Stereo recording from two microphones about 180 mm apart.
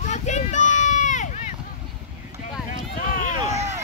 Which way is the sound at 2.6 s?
45° left (ahead or behind).